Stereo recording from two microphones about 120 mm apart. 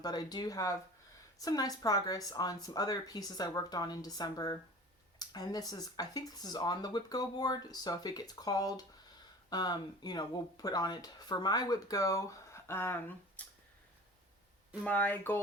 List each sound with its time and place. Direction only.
0.0 s speech: 35° left (ahead or behind); by 13.4 s 20° left (ahead or behind)
14.8 s speech: 15° left (ahead or behind)